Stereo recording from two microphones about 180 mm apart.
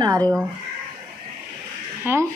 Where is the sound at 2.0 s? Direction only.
15° right (ahead or behind).